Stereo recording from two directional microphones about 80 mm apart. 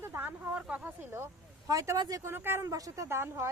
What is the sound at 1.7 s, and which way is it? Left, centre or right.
Speech, right.